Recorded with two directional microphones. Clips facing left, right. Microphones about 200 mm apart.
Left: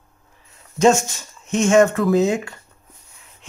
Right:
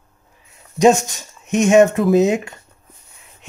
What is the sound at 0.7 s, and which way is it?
Speech, 15° right (ahead or behind).